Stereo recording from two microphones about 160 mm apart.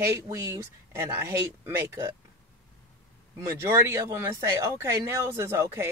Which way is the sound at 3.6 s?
15° right (ahead or behind).